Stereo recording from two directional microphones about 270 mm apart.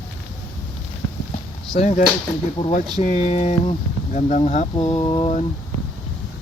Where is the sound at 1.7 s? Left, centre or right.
Left.